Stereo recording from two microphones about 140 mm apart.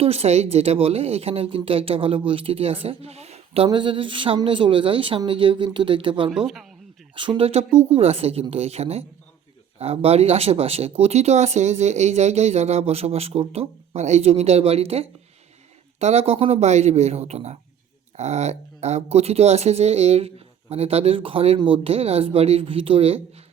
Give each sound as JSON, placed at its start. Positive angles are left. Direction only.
{"t": 0.0, "sound": "speech", "side_deg": -50}